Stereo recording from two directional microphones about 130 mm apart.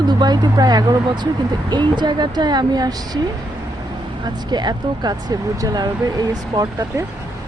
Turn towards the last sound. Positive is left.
turn(degrees=-30)  # may be behind; listen again after turning